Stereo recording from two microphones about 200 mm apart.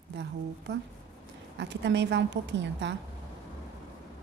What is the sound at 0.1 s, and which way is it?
A woman's voice, 60° right (ahead or behind).